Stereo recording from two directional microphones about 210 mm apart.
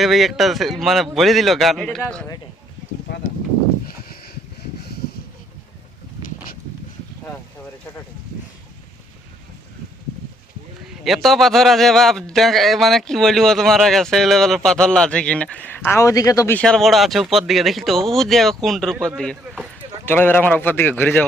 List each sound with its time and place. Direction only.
0.0 s a man's voice: centre (ahead or behind)
6.2 s a sound: 45° left (ahead or behind)
11.0 s a man's voice: centre (ahead or behind)